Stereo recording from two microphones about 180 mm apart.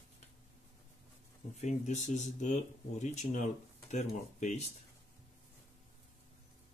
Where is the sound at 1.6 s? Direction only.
40° left (ahead or behind).